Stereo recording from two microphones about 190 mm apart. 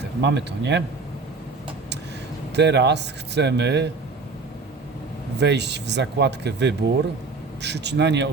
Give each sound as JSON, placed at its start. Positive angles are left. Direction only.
{"t": 0.0, "sound": "speech", "side_deg": -65}
{"t": 2.6, "sound": "speech", "side_deg": -65}
{"t": 5.4, "sound": "speech", "side_deg": -65}